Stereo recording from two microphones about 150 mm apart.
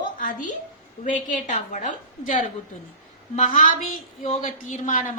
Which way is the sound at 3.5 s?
65° left (ahead or behind).